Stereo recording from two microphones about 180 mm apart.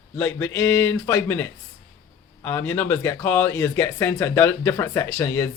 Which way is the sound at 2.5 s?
10° left (ahead or behind).